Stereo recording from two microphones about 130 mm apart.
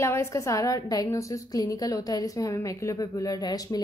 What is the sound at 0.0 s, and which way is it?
A woman's voice, 20° left (ahead or behind).